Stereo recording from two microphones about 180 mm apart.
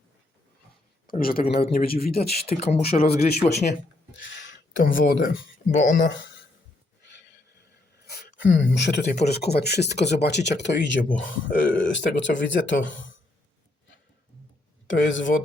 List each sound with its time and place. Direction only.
1.4 s speech: 40° left (ahead or behind)
1.7 s speech: 55° left (ahead or behind)
2.6 s speech: 35° left (ahead or behind)
4.2 s a sound: 90° left
4.8 s speech: 50° left (ahead or behind)
5.7 s speech: 45° left (ahead or behind)
8.0 s speech: 90° left
9.0 s speech: 40° left (ahead or behind)
9.3 s speech: 65° left (ahead or behind)
11.2 s speech: 90° left
14.8 s speech: 90° left